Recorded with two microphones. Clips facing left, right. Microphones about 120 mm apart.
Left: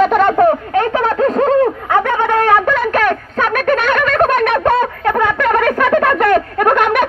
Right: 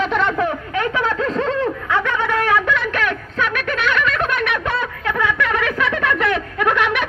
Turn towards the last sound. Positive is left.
turn(degrees=45)  # may be behind; listen again after turning